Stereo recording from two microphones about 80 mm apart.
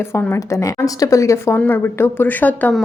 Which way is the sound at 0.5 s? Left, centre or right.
Left.